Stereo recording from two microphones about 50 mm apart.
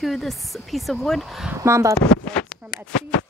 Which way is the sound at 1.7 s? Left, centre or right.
Right.